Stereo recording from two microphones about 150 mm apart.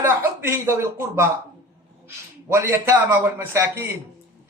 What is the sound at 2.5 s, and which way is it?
A man's voice, 20° right (ahead or behind).